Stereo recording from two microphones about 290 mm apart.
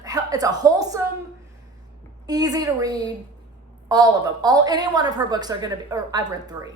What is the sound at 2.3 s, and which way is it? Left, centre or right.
A woman's voice, centre.